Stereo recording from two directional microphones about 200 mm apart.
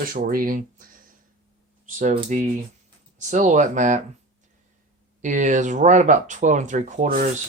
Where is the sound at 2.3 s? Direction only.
40° right (ahead or behind).